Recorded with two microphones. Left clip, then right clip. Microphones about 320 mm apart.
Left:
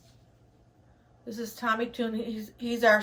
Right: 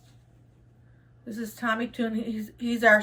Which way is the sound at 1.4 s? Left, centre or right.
Centre.